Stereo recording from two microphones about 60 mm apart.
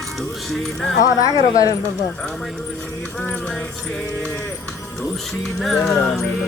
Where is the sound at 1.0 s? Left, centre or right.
Left.